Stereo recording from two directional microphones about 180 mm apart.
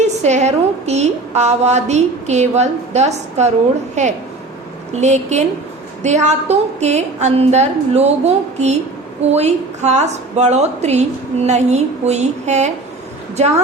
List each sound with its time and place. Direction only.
0.0 s a woman's voice: 40° right (ahead or behind)